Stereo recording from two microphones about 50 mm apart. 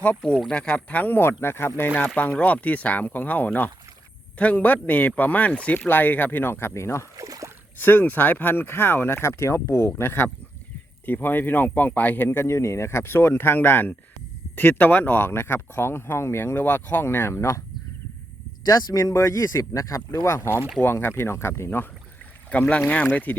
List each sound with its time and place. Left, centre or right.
0.5 s speech: left
2.1 s speech: left
5.7 s speech: left
7.8 s speech: left
11.0 s speech: left
12.5 s speech: left
16.6 s speech: left
18.9 s speech: left
20.8 s speech: left
22.4 s speech: left